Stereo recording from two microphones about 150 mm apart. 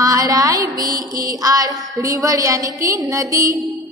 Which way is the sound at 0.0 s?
25° right (ahead or behind).